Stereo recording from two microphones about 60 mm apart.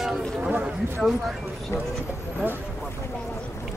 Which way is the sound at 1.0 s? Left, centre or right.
Centre.